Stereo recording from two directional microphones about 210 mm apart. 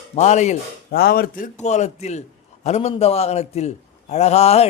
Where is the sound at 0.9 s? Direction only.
45° left (ahead or behind).